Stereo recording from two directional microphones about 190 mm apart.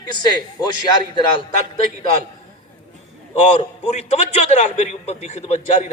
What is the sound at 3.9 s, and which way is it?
A man's voice, 35° left (ahead or behind).